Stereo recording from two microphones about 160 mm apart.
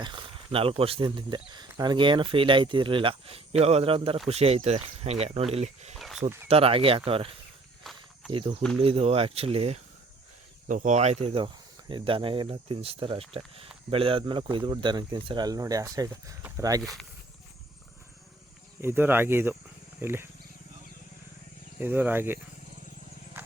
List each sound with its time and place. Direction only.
0.0 s speech: 30° right (ahead or behind)
7.9 s cricket: centre (ahead or behind)
8.3 s speech: 30° right (ahead or behind)
10.7 s speech: 50° right (ahead or behind)
11.3 s speech: 35° right (ahead or behind)
16.8 s speech: centre (ahead or behind)
18.8 s speech: 15° right (ahead or behind)
21.8 s speech: 10° right (ahead or behind)